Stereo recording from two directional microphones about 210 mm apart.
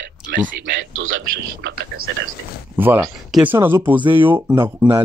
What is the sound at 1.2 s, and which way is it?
Speech, 50° right (ahead or behind).